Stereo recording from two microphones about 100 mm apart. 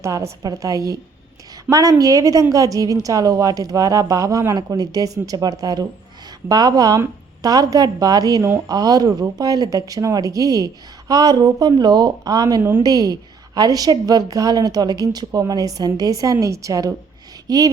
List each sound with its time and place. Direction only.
0.0 s a woman's voice: 30° right (ahead or behind)
8.7 s a woman's voice: 40° right (ahead or behind)